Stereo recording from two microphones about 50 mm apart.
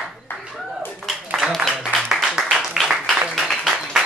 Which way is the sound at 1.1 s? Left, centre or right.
Centre.